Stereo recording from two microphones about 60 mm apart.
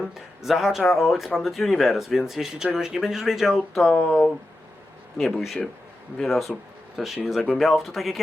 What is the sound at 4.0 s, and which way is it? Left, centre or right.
Speech, left.